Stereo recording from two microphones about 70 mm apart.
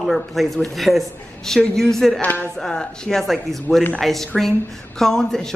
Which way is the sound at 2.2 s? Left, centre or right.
Left.